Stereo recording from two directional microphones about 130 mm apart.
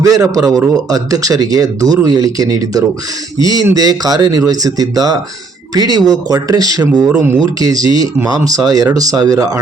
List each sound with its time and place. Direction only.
0.0 s speech: 25° right (ahead or behind)
7.1 s speech: 20° right (ahead or behind)
7.4 s speech: 30° right (ahead or behind)